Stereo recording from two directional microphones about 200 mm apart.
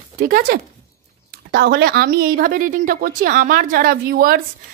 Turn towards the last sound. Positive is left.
turn(degrees=-45)  # may be behind; listen again after turning